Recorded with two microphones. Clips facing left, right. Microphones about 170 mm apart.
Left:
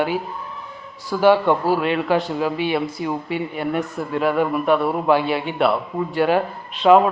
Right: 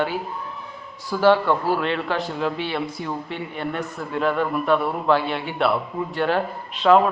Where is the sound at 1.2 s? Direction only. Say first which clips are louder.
Left 2 dB; 10° left (ahead or behind).